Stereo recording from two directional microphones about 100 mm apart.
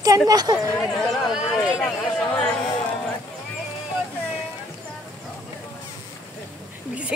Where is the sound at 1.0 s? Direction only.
Centre (ahead or behind).